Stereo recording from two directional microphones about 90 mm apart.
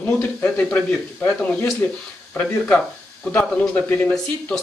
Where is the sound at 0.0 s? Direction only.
20° left (ahead or behind).